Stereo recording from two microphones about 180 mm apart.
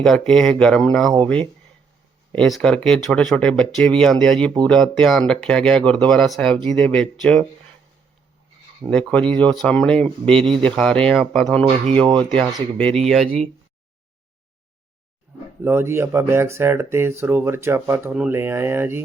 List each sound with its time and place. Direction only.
0.0 s speech: 5° left (ahead or behind)
2.3 s speech: 5° left (ahead or behind)
8.9 s speech: 5° left (ahead or behind)
11.9 s speech: 30° right (ahead or behind)
12.7 s speech: 5° left (ahead or behind)
15.6 s speech: 15° right (ahead or behind)